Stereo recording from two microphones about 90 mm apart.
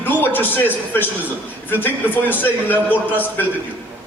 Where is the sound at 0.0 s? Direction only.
20° left (ahead or behind).